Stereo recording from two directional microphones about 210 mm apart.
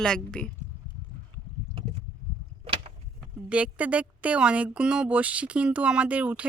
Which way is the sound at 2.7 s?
25° right (ahead or behind).